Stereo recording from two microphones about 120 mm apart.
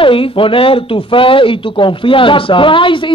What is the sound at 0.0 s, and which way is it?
Speech, 45° left (ahead or behind).